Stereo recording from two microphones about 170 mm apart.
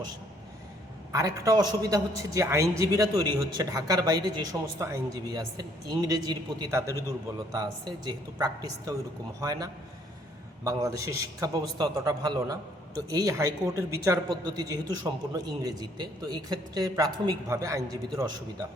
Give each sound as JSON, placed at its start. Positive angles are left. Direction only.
{"t": 1.1, "sound": "a man's voice", "side_deg": -20}